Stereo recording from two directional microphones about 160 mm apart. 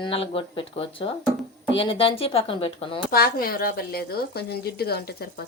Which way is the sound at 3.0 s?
70° left (ahead or behind).